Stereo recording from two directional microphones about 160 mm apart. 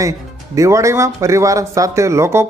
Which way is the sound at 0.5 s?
20° right (ahead or behind).